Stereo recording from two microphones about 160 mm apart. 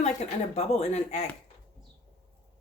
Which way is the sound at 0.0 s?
45° left (ahead or behind).